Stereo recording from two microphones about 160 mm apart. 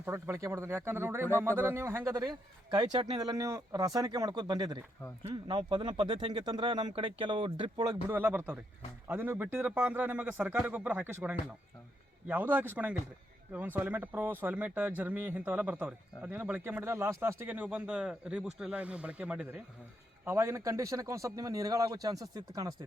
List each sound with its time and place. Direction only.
0.0 s speech: 15° right (ahead or behind)
8.1 s speech: 10° right (ahead or behind)